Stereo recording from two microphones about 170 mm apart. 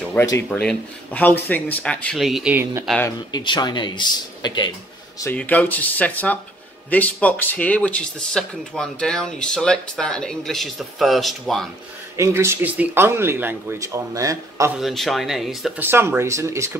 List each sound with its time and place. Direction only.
0.1 s speech: 15° left (ahead or behind); by 2.8 s 10° right (ahead or behind)
3.3 s speech: 25° left (ahead or behind)
5.2 s speech: 10° left (ahead or behind)
12.2 s speech: 15° right (ahead or behind)
14.8 s speech: centre (ahead or behind)
15.8 s speech: 10° right (ahead or behind)